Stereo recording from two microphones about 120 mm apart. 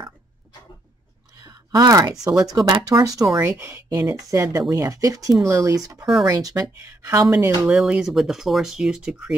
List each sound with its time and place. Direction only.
1.4 s a sound: 30° right (ahead or behind)
2.5 s speech: 30° right (ahead or behind)
7.6 s speech: 5° right (ahead or behind)